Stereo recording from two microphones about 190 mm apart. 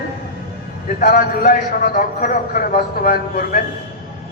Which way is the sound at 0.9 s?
50° left (ahead or behind).